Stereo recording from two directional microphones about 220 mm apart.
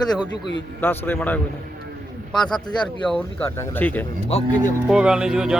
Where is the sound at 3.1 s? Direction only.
5° left (ahead or behind).